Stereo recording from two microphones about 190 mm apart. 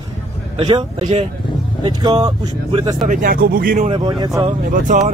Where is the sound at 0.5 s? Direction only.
25° right (ahead or behind).